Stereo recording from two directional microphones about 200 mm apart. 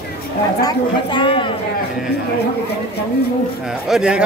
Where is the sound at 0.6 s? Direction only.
25° left (ahead or behind).